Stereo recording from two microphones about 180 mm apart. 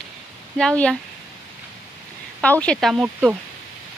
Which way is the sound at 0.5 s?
5° left (ahead or behind).